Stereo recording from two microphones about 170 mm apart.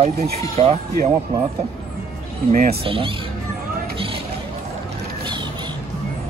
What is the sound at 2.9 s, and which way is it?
Speech, 30° right (ahead or behind).